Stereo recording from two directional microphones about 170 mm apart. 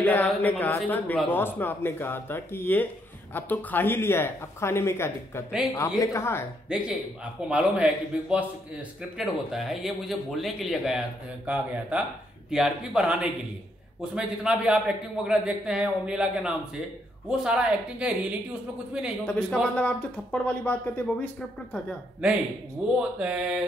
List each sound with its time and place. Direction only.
0.0 s speech: 10° left (ahead or behind)
6.7 s a man's voice: 5° right (ahead or behind)
19.2 s speech: 5° left (ahead or behind)
22.9 s a man's voice: 5° right (ahead or behind)